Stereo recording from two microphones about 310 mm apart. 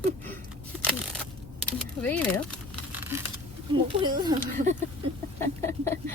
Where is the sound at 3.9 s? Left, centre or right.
Centre.